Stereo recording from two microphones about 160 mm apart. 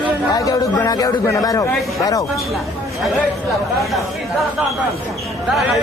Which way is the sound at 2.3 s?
Centre (ahead or behind).